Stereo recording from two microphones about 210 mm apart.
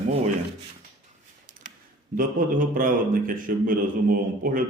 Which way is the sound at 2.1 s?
40° right (ahead or behind).